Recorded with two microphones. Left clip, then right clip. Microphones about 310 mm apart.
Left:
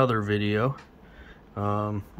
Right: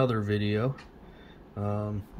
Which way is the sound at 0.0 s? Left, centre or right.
Centre.